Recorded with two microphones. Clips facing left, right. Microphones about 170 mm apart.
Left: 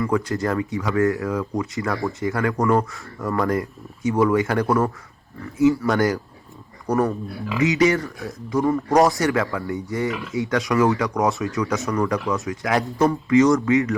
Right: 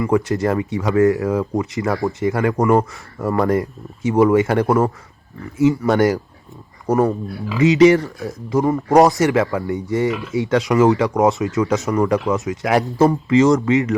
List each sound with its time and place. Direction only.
0.0 s speech: 20° right (ahead or behind)